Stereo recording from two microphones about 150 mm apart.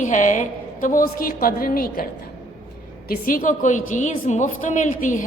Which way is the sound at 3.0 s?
65° left (ahead or behind).